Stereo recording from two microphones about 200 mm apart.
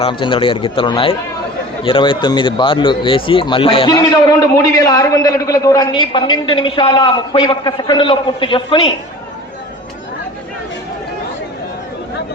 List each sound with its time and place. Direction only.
0.0 s a man's voice: 25° left (ahead or behind)